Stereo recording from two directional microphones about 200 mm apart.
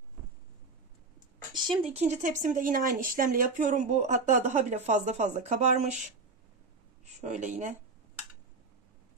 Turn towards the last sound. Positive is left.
turn(degrees=-40)  # may be behind; listen again after turning